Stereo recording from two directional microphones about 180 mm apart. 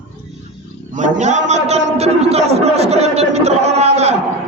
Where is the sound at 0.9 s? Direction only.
45° right (ahead or behind).